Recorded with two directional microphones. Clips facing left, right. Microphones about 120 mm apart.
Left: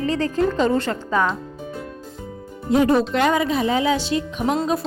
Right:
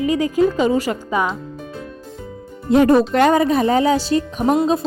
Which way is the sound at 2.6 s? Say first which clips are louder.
Right 4 dB; 65° right (ahead or behind).